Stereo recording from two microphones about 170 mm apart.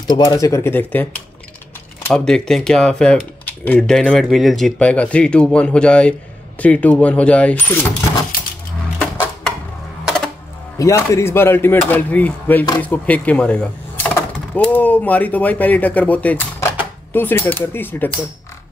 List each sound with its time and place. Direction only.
0.0 s speech: 20° left (ahead or behind)
10.0 s typewriter: 5° left (ahead or behind)
10.8 s speech: 15° left (ahead or behind)